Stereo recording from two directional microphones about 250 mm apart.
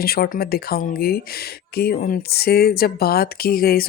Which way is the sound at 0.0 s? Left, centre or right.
Left.